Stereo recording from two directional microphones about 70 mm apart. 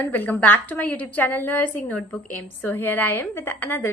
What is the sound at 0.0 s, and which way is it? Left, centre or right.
A woman's voice, left.